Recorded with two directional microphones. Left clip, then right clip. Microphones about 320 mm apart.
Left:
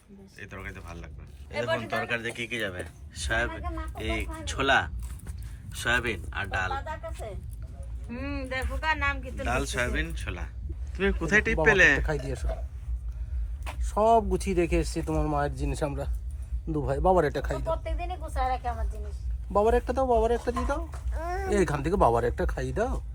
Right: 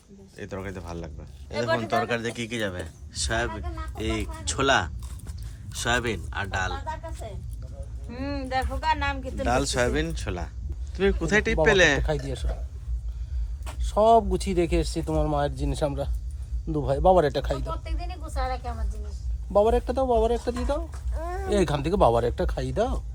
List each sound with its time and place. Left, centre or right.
0.3 s speech: centre
8.1 s speech: right
9.4 s speech: centre
13.7 s speech: centre
17.3 s speech: centre
17.9 s a sound: left
19.5 s speech: centre